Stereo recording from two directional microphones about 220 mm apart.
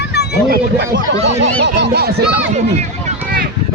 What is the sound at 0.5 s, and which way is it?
Speech, 50° right (ahead or behind).